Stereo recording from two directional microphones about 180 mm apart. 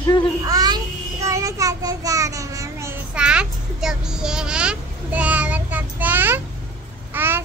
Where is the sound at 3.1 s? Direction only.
5° right (ahead or behind).